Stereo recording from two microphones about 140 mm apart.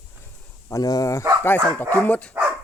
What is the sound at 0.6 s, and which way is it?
Speech, 25° left (ahead or behind).